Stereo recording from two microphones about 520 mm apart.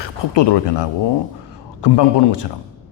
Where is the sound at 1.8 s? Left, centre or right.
Left.